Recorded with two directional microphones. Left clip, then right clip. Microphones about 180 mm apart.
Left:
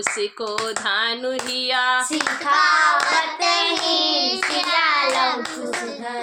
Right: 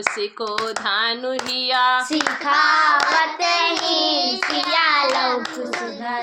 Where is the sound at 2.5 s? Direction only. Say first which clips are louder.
Even; 45° left (ahead or behind).